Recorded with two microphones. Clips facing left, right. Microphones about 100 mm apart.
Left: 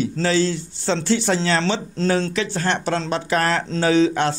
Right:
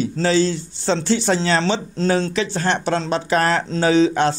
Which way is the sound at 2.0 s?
15° right (ahead or behind).